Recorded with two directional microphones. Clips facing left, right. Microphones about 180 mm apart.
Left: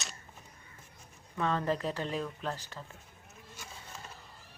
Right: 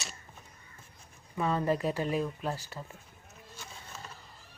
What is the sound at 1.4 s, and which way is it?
A woman's voice, 10° right (ahead or behind).